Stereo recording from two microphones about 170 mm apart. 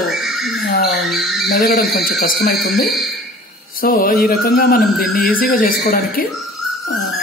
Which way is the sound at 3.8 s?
60° left (ahead or behind).